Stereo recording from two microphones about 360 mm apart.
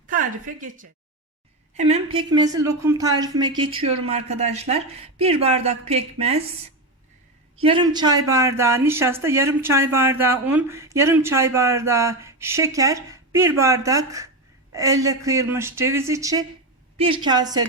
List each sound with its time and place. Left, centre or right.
0.1 s speech: right
7.6 s speech: centre